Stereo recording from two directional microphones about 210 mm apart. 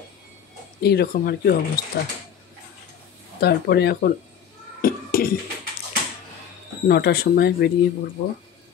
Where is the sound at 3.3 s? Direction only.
50° left (ahead or behind).